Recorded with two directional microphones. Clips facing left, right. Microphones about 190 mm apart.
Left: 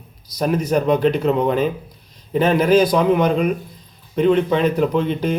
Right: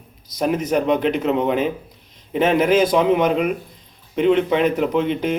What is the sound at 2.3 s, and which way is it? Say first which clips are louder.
A man's voice: left 1 dB; 20° right (ahead or behind).